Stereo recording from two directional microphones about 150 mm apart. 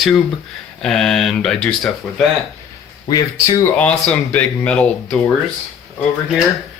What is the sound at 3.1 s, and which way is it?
Speech, 25° left (ahead or behind).